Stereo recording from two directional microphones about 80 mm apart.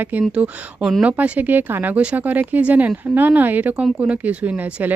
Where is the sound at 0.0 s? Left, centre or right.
Centre.